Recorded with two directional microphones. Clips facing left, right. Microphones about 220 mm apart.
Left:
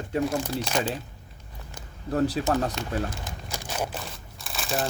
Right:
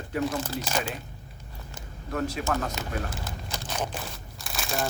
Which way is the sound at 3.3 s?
15° left (ahead or behind).